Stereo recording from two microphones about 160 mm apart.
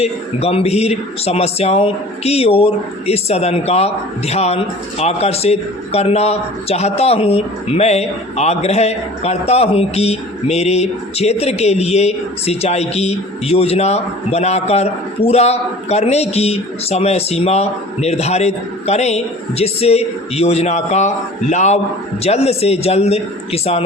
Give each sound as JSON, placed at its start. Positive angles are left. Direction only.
{"t": 0.0, "sound": "a man's voice", "side_deg": 40}